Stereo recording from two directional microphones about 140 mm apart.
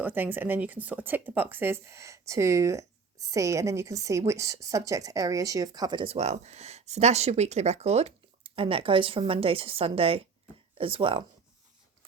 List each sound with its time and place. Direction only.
0.0 s a woman's voice: 15° right (ahead or behind); by 6.1 s 35° right (ahead or behind)
6.1 s speech: 50° right (ahead or behind)